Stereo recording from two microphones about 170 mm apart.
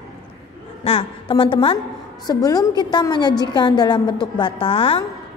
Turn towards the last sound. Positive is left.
turn(degrees=30)  # may be behind; listen again after turning